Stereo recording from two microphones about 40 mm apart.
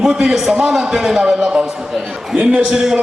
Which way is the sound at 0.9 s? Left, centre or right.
Centre.